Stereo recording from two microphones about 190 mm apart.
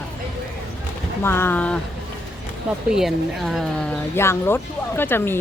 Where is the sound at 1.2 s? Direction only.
10° left (ahead or behind).